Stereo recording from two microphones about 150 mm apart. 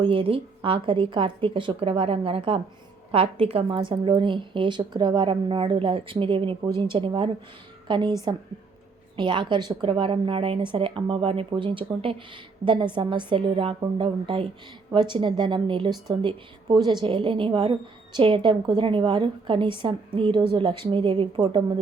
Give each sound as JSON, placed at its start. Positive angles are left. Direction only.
{"t": 0.0, "sound": "a woman's voice", "side_deg": -35}
{"t": 9.1, "sound": "a woman's voice", "side_deg": -30}